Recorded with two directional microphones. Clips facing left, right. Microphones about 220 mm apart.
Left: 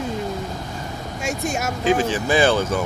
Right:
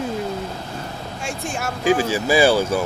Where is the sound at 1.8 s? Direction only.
10° right (ahead or behind).